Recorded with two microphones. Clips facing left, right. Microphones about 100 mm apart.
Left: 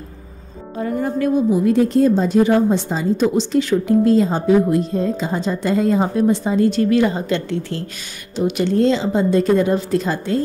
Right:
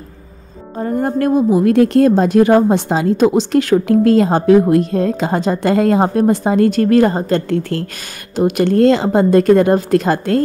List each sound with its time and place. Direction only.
0.7 s speech: 35° right (ahead or behind)
1.0 s a woman's voice: 50° right (ahead or behind); by 3.3 s 75° right (ahead or behind)
3.3 s a woman's voice: 60° right (ahead or behind)